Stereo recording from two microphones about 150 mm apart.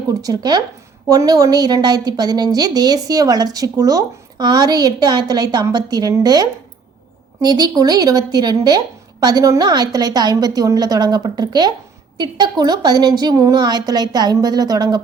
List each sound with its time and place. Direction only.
0.1 s speech: 25° right (ahead or behind)